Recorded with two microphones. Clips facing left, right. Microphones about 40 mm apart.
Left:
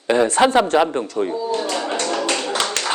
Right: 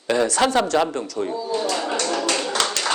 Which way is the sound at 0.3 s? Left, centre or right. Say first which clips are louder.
Left 4 dB; left.